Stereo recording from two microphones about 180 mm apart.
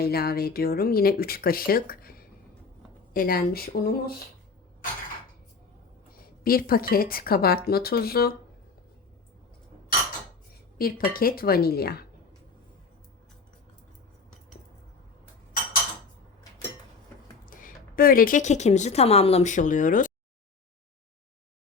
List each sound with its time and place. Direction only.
0.0 s speech: 60° left (ahead or behind)
6.1 s speech: 55° left (ahead or behind)
10.8 s speech: 55° left (ahead or behind)
17.4 s a woman's voice: 50° left (ahead or behind)